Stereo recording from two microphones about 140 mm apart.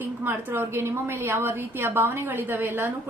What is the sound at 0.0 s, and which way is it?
A woman's voice, 15° right (ahead or behind).